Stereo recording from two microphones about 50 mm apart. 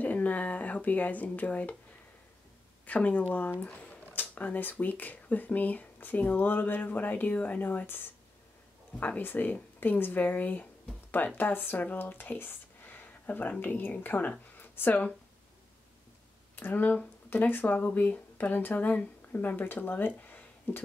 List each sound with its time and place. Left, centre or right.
0.0 s speech: left
2.9 s speech: left
3.6 s a sound: left
4.1 s speech: left
8.9 s speech: left
14.6 s a sound: left
16.5 s speech: left